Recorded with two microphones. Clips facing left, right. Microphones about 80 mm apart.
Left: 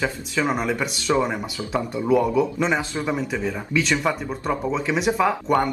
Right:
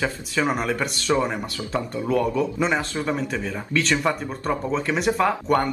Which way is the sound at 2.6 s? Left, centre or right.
Centre.